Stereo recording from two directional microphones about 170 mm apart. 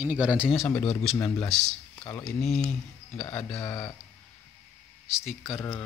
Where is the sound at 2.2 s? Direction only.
Centre (ahead or behind).